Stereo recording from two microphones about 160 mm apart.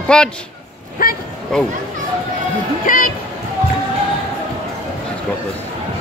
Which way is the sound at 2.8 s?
55° left (ahead or behind).